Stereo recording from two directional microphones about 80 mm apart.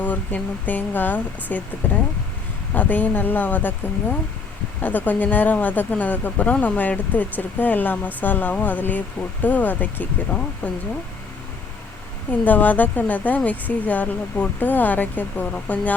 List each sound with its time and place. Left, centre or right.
0.0 s speech: centre
4.8 s speech: left
12.3 s speech: left